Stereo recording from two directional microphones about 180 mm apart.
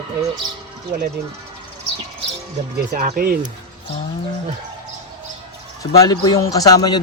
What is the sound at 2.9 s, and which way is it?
Speech, 55° right (ahead or behind).